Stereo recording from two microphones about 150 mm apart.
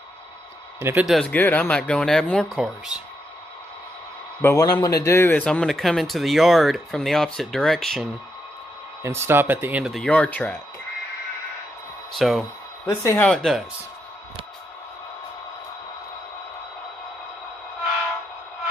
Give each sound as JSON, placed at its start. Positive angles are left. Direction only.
{"t": 0.8, "sound": "speech", "side_deg": -15}
{"t": 1.0, "sound": "speech", "side_deg": 0}
{"t": 1.3, "sound": "speech", "side_deg": 10}
{"t": 4.4, "sound": "speech", "side_deg": 20}
{"t": 9.0, "sound": "speech", "side_deg": -15}
{"t": 9.9, "sound": "speech", "side_deg": 5}
{"t": 12.1, "sound": "speech", "side_deg": 0}
{"t": 12.8, "sound": "speech", "side_deg": 15}
{"t": 13.3, "sound": "speech", "side_deg": 0}